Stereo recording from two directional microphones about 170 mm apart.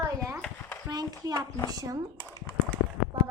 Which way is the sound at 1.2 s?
20° right (ahead or behind).